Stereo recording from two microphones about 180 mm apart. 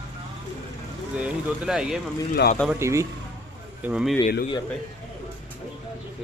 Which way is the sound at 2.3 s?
55° left (ahead or behind).